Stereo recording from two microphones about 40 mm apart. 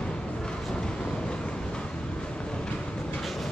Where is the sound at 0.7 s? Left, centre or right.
Centre.